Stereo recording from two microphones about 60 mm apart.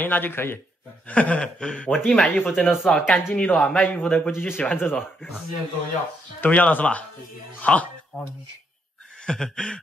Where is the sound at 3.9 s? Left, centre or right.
Left.